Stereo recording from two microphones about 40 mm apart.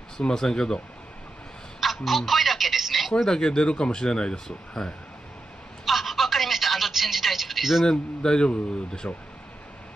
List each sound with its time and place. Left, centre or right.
0.2 s speech: centre
1.8 s telephone: centre
3.3 s speech: centre
5.9 s telephone: centre
7.8 s a man's voice: centre